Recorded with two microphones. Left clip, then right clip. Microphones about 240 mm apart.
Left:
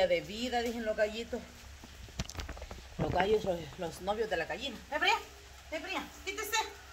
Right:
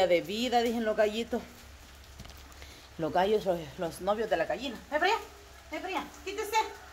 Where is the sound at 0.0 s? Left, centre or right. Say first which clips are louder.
Right 4 dB; right.